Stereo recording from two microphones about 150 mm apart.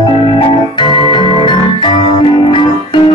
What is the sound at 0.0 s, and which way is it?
Music, 35° left (ahead or behind).